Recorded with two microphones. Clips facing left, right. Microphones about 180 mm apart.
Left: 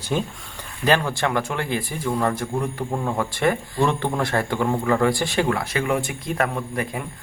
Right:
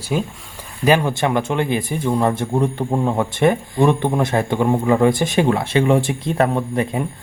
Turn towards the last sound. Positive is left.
turn(degrees=-25)  # may be behind; listen again after turning